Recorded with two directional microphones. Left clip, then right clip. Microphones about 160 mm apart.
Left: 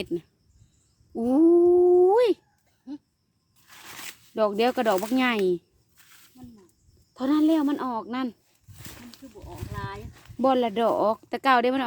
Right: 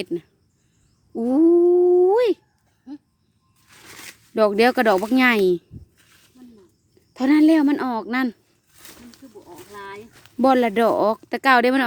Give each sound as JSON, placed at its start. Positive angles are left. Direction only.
{"t": 0.0, "sound": "speech", "side_deg": -15}
{"t": 1.1, "sound": "cat", "side_deg": -15}
{"t": 3.8, "sound": "zipper", "side_deg": 25}
{"t": 4.4, "sound": "speech", "side_deg": -45}
{"t": 6.0, "sound": "snake", "side_deg": 25}
{"t": 7.1, "sound": "a woman's voice", "side_deg": -55}
{"t": 8.8, "sound": "a sound", "side_deg": 0}
{"t": 10.4, "sound": "speech", "side_deg": -45}